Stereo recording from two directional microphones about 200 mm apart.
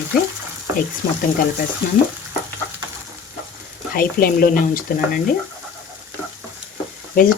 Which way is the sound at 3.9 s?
45° left (ahead or behind).